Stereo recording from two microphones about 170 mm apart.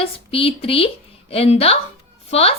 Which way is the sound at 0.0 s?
35° left (ahead or behind).